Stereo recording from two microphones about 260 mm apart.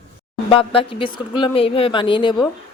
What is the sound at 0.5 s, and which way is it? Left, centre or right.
A woman's voice, left.